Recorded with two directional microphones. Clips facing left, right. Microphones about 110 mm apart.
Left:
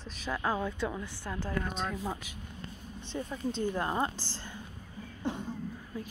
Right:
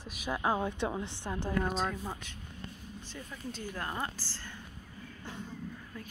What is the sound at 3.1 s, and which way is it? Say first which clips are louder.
Speech: left 9 dB; 25° left (ahead or behind).